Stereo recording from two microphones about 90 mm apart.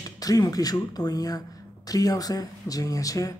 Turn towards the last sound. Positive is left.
turn(degrees=40)  # may be behind; listen again after turning